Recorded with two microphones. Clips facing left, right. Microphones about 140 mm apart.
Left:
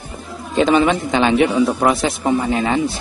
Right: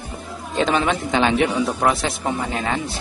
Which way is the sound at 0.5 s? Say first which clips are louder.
Left 5 dB; 5° left (ahead or behind).